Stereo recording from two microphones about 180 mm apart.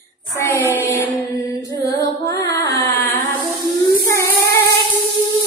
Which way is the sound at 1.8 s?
20° left (ahead or behind).